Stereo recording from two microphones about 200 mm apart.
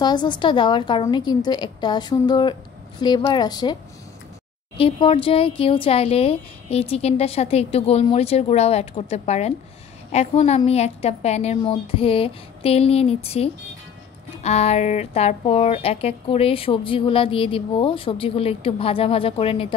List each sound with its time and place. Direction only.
0.0 s speech: 20° left (ahead or behind)
4.7 s a woman's voice: 25° left (ahead or behind)